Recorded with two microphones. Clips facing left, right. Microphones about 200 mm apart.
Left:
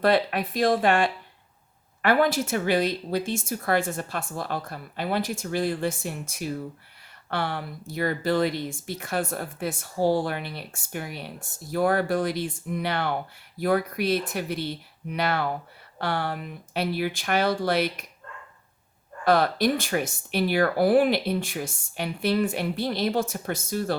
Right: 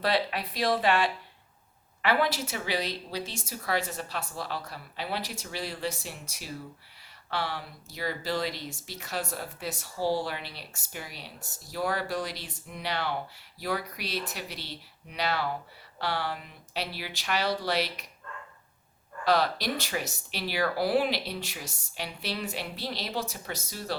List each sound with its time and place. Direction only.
0.0 s speech: 50° left (ahead or behind)
19.2 s speech: 50° left (ahead or behind)